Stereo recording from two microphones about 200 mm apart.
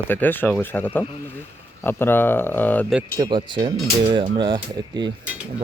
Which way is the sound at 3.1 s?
20° right (ahead or behind).